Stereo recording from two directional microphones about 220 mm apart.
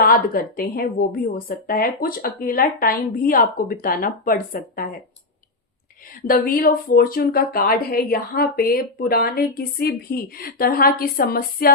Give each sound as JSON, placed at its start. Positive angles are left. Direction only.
{"t": 0.0, "sound": "speech", "side_deg": 40}
{"t": 6.2, "sound": "speech", "side_deg": 40}